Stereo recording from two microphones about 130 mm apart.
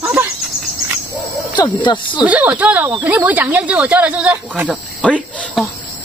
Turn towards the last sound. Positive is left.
turn(degrees=10)  # may be behind; listen again after turning